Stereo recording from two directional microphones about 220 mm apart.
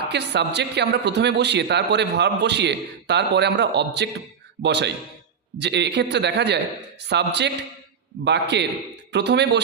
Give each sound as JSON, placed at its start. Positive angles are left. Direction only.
{"t": 0.1, "sound": "a man's voice", "side_deg": -50}